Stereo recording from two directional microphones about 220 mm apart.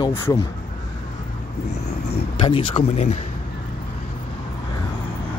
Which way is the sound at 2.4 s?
25° left (ahead or behind).